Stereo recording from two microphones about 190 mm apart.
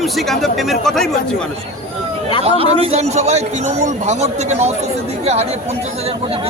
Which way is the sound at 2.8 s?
35° right (ahead or behind).